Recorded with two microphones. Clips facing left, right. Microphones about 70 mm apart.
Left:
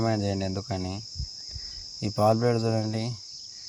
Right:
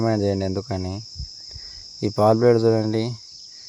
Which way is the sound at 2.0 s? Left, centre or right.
Right.